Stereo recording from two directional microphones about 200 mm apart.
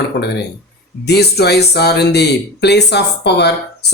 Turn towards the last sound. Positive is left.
turn(degrees=55)  # may be behind; listen again after turning